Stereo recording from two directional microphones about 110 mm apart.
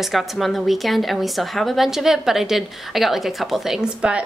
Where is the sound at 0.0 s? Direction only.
Centre (ahead or behind).